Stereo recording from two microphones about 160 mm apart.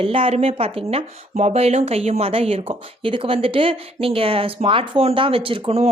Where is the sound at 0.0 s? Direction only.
35° right (ahead or behind).